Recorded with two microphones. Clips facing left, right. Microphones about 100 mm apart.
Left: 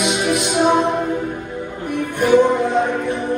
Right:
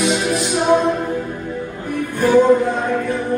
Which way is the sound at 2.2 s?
20° left (ahead or behind).